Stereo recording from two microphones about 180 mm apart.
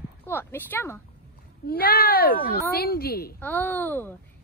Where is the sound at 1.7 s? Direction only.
55° left (ahead or behind).